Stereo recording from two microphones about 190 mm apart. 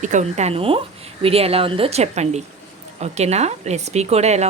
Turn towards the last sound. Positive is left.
turn(degrees=-35)  # may be behind; listen again after turning